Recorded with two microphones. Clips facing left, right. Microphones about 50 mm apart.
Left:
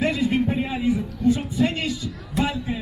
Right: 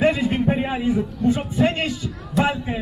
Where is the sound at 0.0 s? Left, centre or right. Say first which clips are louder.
Right 3 dB; right.